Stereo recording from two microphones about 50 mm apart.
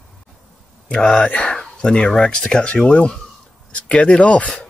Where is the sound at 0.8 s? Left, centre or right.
Centre.